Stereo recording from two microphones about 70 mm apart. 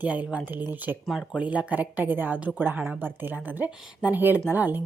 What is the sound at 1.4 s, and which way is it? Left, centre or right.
A woman's voice, centre.